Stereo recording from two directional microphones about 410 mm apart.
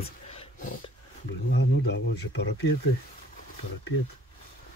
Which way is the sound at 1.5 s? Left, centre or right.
Left.